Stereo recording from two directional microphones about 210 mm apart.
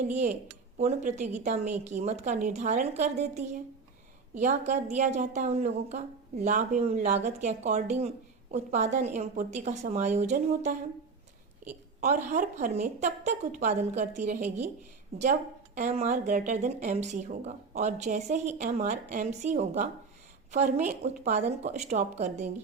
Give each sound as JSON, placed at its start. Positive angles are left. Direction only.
{"t": 0.8, "sound": "a woman's voice", "side_deg": -30}
{"t": 11.9, "sound": "a woman's voice", "side_deg": -35}